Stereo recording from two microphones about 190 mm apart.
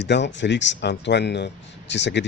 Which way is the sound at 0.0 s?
70° left (ahead or behind).